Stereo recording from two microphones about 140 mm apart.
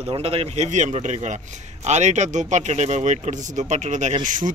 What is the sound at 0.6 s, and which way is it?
Speech, 60° right (ahead or behind).